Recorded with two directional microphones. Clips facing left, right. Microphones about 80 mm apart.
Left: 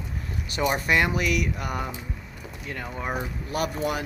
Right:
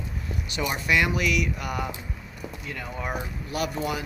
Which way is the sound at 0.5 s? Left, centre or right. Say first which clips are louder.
Left 2 dB; left.